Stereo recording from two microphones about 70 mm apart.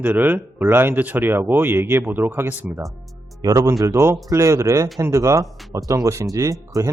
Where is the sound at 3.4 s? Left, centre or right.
Right.